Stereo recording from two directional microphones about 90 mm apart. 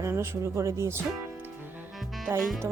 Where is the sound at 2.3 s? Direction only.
25° right (ahead or behind).